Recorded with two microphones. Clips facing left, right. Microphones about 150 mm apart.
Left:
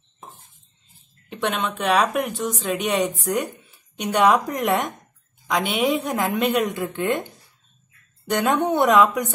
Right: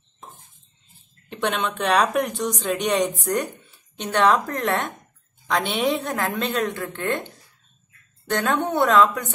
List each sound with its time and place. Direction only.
1.3 s a woman's voice: centre (ahead or behind)
8.3 s a woman's voice: 15° left (ahead or behind)